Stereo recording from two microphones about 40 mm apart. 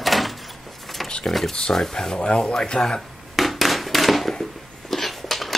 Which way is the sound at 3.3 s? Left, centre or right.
Centre.